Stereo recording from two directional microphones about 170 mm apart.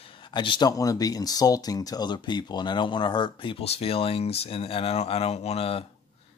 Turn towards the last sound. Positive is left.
turn(degrees=35)  # may be behind; listen again after turning